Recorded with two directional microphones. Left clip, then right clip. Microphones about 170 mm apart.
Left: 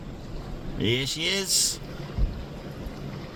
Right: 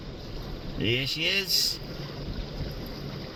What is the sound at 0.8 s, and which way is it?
Speech, 15° left (ahead or behind).